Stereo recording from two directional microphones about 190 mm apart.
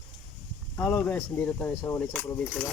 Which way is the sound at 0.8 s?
10° left (ahead or behind).